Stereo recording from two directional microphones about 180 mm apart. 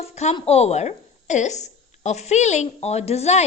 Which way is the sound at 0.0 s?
40° left (ahead or behind).